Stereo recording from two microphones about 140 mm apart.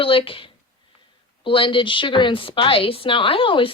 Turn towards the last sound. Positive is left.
turn(degrees=40)  # may be behind; listen again after turning